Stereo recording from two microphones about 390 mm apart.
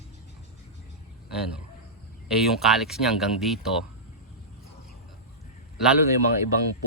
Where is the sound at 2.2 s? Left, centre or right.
Centre.